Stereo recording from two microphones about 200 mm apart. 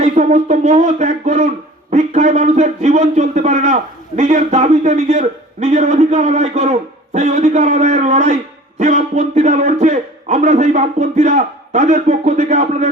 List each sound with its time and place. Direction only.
0.0 s a man's voice: 35° right (ahead or behind)